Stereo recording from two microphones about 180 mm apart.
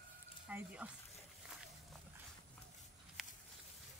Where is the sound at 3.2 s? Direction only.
Centre (ahead or behind).